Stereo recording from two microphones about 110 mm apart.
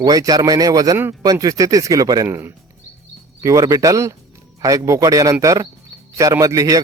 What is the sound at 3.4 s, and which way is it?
A man's voice, 30° right (ahead or behind).